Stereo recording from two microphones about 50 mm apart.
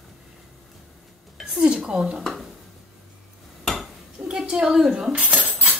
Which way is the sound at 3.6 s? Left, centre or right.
Centre.